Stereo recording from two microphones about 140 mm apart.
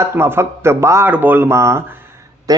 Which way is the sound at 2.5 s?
25° right (ahead or behind).